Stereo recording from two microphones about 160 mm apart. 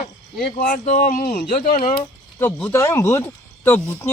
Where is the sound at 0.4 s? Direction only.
50° left (ahead or behind); by 1.5 s 70° left (ahead or behind).